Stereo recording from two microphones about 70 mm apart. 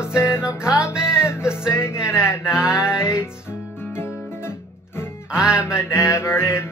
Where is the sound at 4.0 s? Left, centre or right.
Left.